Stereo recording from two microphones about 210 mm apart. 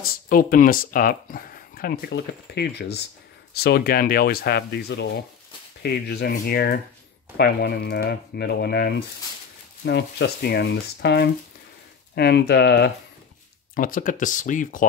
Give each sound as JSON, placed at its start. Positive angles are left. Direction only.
{"t": 0.0, "sound": "speech", "side_deg": 45}
{"t": 13.7, "sound": "speech", "side_deg": 40}